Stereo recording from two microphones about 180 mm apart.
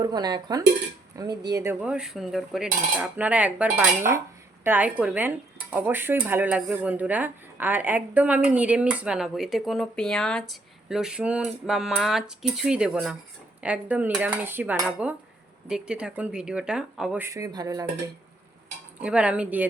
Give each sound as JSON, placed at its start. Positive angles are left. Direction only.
{"t": 0.0, "sound": "cutlery", "side_deg": -20}
{"t": 1.8, "sound": "speech", "side_deg": -5}
{"t": 18.9, "sound": "speech", "side_deg": -5}